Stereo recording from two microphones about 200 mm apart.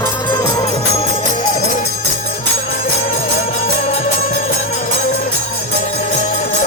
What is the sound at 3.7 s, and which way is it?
Music, 45° left (ahead or behind).